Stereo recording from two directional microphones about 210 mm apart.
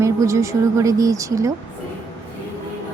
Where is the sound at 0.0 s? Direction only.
15° right (ahead or behind).